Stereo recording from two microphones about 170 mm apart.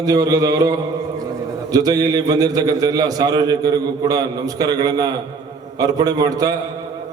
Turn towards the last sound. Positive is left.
turn(degrees=-20)  # may be behind; listen again after turning